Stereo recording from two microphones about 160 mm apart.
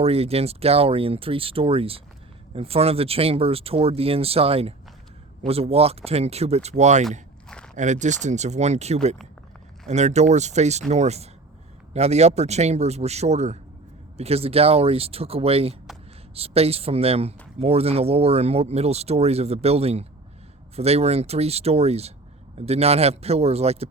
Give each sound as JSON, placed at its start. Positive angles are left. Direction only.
{"t": 0.0, "sound": "speech", "side_deg": -40}
{"t": 7.4, "sound": "a sound", "side_deg": 5}
{"t": 7.8, "sound": "speech", "side_deg": -50}